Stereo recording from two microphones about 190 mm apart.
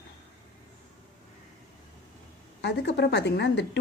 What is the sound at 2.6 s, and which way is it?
A woman's voice, 60° left (ahead or behind).